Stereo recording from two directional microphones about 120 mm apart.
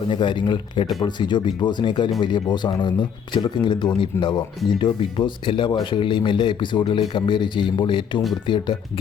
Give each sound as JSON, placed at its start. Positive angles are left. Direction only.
{"t": 0.1, "sound": "speech", "side_deg": 40}